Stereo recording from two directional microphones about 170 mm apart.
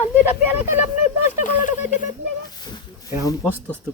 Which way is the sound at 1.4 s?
45° left (ahead or behind).